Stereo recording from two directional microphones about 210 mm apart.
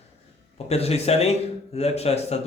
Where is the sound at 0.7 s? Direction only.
30° left (ahead or behind).